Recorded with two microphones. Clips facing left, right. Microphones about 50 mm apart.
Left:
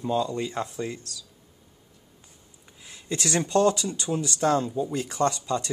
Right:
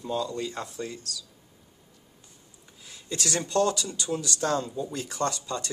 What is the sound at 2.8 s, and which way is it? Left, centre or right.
Speech, left.